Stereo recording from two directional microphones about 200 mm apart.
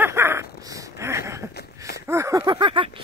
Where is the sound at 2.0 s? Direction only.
15° right (ahead or behind).